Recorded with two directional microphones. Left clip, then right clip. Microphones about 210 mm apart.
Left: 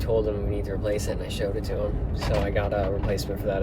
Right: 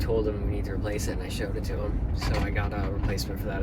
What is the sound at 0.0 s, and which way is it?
Speech, 20° left (ahead or behind).